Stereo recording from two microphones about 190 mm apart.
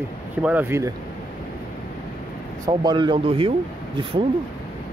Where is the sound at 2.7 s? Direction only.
25° right (ahead or behind).